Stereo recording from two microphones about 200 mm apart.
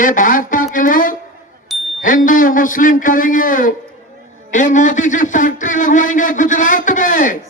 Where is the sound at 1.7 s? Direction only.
Centre (ahead or behind).